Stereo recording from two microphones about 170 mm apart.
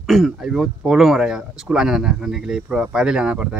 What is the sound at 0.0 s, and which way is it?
Speech, centre (ahead or behind).